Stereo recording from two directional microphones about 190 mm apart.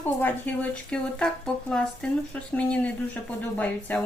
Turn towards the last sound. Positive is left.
turn(degrees=10)  # may be behind; listen again after turning